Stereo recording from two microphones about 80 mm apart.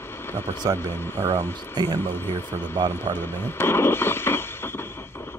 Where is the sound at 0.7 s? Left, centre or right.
Left.